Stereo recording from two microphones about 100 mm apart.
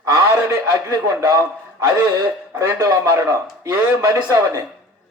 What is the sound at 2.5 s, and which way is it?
Speech, 30° right (ahead or behind).